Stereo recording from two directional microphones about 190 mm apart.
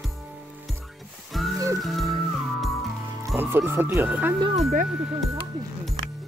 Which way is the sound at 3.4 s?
10° right (ahead or behind).